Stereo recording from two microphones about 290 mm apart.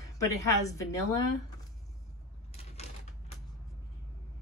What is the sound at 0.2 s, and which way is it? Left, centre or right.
A woman's voice, centre.